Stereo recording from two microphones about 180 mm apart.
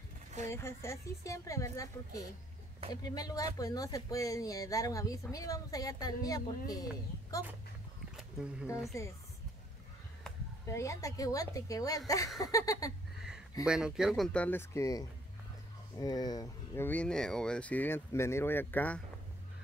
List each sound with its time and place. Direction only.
0.5 s speech: 15° left (ahead or behind)
8.2 s a sound: 5° right (ahead or behind)
8.9 s speech: 15° left (ahead or behind)
10.7 s speech: 15° left (ahead or behind)
13.7 s speech: 5° right (ahead or behind)